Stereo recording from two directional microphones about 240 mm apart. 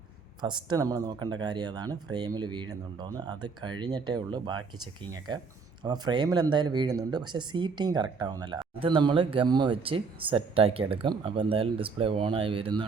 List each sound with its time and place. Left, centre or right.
0.4 s speech: centre